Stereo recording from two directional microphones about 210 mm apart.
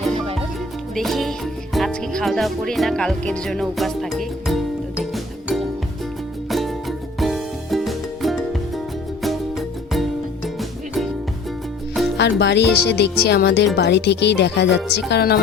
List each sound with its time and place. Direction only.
0.9 s music: centre (ahead or behind)
1.7 s speech: centre (ahead or behind)
5.1 s music: centre (ahead or behind)
12.4 s speech: 55° left (ahead or behind)